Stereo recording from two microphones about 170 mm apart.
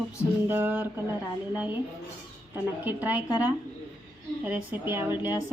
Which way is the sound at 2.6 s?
10° right (ahead or behind).